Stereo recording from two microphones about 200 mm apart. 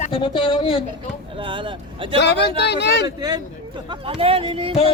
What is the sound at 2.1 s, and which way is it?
Speech, 60° left (ahead or behind).